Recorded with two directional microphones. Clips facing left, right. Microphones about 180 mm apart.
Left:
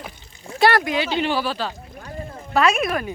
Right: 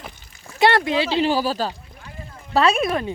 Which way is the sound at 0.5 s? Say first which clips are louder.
Right 1 dB; 25° right (ahead or behind).